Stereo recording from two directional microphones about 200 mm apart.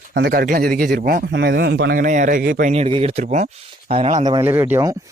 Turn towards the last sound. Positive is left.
turn(degrees=-10)  # may be behind; listen again after turning